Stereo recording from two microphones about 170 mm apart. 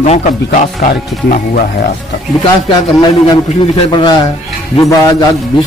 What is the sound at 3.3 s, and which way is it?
Speech, 30° left (ahead or behind).